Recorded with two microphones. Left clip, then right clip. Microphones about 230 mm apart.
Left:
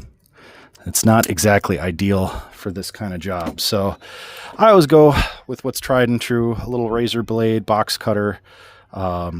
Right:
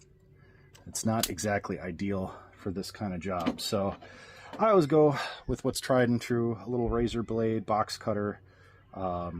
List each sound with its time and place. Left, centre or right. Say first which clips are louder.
1.0 s speech: left 16 dB; left